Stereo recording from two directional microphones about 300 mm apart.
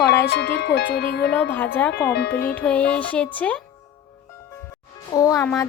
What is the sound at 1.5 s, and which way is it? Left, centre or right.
Speech, centre.